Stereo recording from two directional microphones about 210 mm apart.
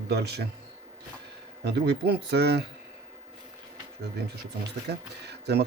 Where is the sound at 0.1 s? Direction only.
50° right (ahead or behind).